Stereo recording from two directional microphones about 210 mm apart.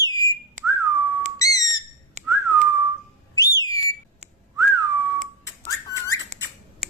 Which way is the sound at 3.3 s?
15° left (ahead or behind).